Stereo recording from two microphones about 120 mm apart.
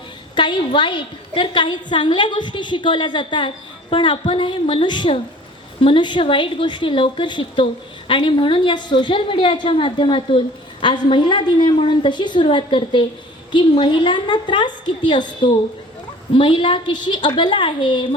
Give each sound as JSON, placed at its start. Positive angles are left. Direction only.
{"t": 0.3, "sound": "a woman's voice", "side_deg": 40}
{"t": 16.3, "sound": "a woman's voice", "side_deg": 45}